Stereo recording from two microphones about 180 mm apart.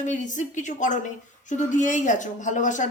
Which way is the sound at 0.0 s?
45° left (ahead or behind).